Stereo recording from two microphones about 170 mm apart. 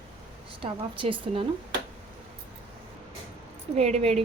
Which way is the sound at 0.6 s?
30° right (ahead or behind).